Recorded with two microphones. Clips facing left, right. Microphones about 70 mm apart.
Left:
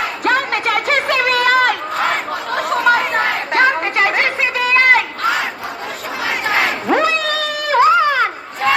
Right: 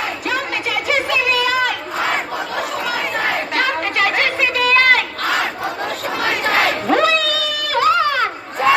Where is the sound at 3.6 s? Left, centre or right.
Left.